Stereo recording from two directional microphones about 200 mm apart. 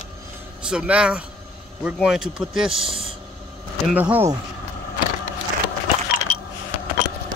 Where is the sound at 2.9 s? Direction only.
25° right (ahead or behind).